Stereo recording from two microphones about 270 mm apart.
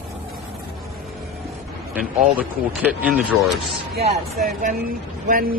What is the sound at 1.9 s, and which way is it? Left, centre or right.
Speech, centre.